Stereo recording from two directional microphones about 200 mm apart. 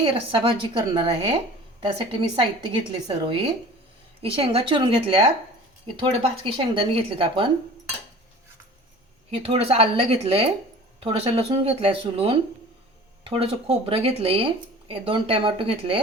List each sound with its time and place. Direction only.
0.0 s speech: 25° right (ahead or behind)
9.3 s speech: 30° right (ahead or behind)